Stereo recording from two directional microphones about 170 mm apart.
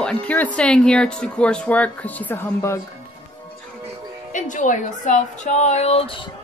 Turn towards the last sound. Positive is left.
turn(degrees=30)  # may be behind; listen again after turning